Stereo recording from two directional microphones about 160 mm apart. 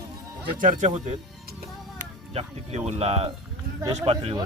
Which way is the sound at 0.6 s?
50° right (ahead or behind).